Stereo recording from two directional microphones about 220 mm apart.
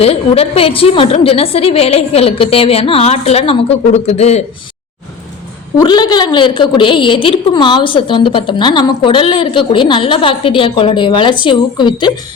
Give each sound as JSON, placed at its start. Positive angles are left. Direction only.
{"t": 0.0, "sound": "a woman's voice", "side_deg": 25}
{"t": 5.7, "sound": "a woman's voice", "side_deg": 20}